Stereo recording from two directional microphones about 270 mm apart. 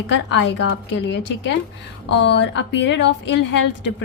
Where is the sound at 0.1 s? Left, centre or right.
Left.